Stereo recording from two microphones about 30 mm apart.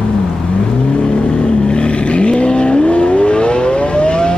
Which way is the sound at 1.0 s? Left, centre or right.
Left.